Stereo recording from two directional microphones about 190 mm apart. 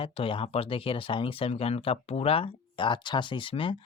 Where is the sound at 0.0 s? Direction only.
30° left (ahead or behind).